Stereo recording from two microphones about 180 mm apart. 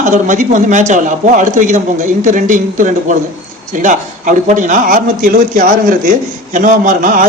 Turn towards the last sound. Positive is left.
turn(degrees=-50)  # may be behind; listen again after turning